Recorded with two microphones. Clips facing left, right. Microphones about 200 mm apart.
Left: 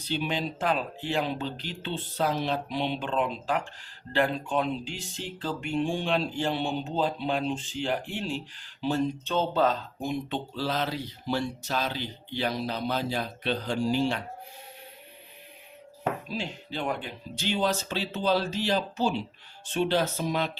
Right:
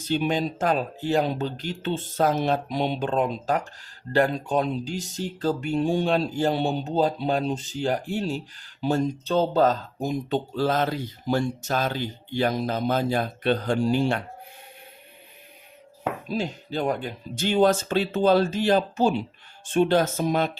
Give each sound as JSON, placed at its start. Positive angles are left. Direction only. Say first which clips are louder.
{"t": 0.0, "sound": "speech", "louder": "right 6 dB", "side_deg": -45}
{"t": 16.3, "sound": "speech", "louder": "right 6 dB", "side_deg": -45}